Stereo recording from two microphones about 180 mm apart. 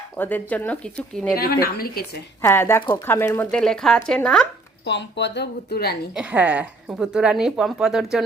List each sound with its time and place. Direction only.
0.2 s speech: 10° left (ahead or behind)
1.4 s a woman's voice: 55° left (ahead or behind)
2.4 s speech: 15° left (ahead or behind)
4.9 s speech: 75° left (ahead or behind)
6.1 s speech: 5° right (ahead or behind)